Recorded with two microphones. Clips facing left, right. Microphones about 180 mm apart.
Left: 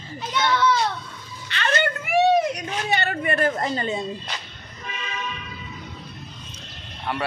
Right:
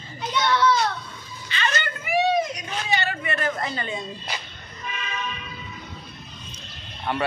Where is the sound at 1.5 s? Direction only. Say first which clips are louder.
Left 4 dB; 60° left (ahead or behind).